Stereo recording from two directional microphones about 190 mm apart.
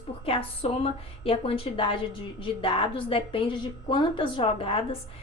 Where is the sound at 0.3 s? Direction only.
30° left (ahead or behind).